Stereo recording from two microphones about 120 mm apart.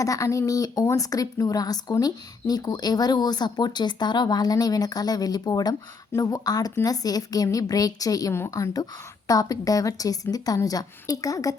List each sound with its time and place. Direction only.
0.0 s a woman's voice: 25° left (ahead or behind)